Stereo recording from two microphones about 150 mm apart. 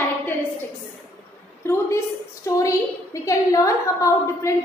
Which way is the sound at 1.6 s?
15° left (ahead or behind).